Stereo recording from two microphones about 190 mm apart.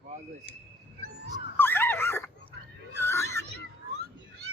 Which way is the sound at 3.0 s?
15° left (ahead or behind).